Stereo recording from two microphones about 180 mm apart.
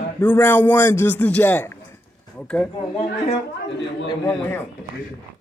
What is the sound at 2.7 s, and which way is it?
Speech, 30° left (ahead or behind).